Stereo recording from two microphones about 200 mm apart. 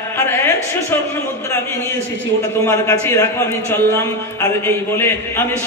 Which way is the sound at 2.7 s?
15° left (ahead or behind).